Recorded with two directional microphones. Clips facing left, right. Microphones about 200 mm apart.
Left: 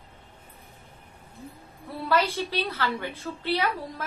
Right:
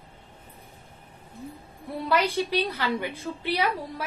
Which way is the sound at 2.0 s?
15° right (ahead or behind).